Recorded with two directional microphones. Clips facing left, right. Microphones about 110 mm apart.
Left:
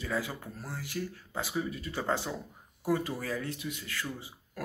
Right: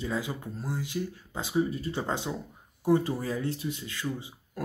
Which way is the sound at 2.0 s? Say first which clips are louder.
Even; 20° right (ahead or behind).